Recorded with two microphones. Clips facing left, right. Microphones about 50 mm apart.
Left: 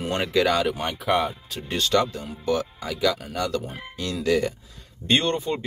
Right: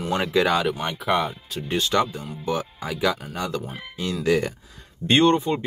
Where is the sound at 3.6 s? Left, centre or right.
Centre.